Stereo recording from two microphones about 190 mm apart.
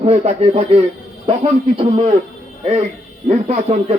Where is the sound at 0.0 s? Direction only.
35° right (ahead or behind).